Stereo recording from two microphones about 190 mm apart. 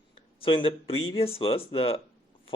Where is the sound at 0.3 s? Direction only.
30° left (ahead or behind).